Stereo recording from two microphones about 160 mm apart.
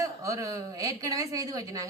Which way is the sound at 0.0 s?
20° right (ahead or behind).